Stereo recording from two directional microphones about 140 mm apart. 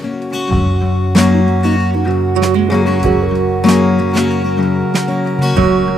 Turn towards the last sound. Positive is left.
turn(degrees=0)  # may be behind; listen again after turning